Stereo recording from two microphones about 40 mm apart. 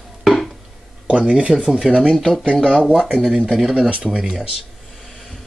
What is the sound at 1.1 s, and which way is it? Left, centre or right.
Speech, right.